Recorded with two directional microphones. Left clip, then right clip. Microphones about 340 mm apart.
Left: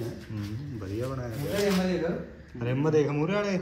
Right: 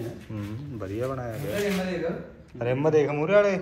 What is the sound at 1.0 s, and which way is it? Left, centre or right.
Speech, right.